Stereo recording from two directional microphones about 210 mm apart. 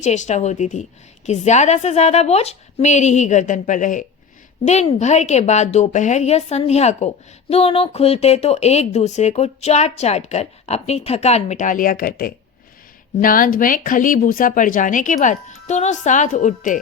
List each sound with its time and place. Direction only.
0.0 s speech: 35° left (ahead or behind)